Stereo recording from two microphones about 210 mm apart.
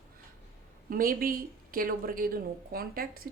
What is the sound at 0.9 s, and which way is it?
Speech, 45° right (ahead or behind).